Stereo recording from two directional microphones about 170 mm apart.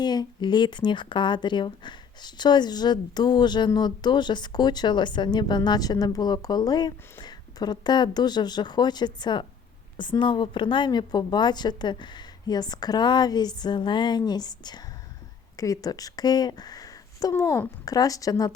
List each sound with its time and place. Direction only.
0.0 s speech: 25° left (ahead or behind)